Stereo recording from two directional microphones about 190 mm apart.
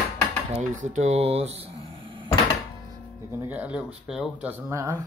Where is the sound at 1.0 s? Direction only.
35° right (ahead or behind).